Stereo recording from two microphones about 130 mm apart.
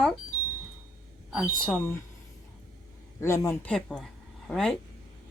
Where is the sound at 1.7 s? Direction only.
10° left (ahead or behind).